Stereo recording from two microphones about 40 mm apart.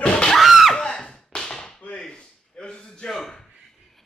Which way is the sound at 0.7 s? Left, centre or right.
Centre.